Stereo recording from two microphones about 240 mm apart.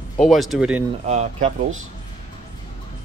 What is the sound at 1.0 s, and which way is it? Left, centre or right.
Speech, right.